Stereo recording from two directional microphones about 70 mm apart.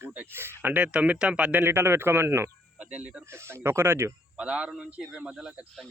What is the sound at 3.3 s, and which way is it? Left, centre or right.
Speech, right.